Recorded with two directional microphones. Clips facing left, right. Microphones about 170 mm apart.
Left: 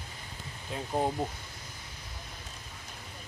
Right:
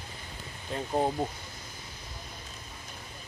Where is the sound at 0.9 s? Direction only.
10° right (ahead or behind).